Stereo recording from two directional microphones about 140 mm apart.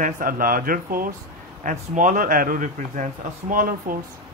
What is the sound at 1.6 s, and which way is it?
Speech, 65° right (ahead or behind).